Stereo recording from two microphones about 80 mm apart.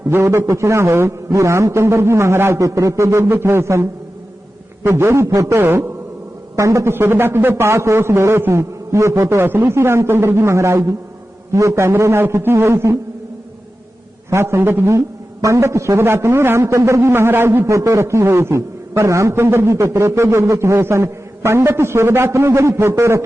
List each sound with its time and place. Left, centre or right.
0.1 s speech: right
6.9 s speech: right
14.3 s speech: right
17.7 s speech: right